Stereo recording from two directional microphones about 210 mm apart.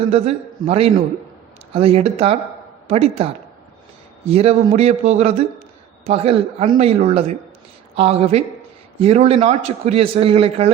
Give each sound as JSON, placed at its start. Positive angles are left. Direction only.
{"t": 0.1, "sound": "a man's voice", "side_deg": -30}
{"t": 4.3, "sound": "a man's voice", "side_deg": -30}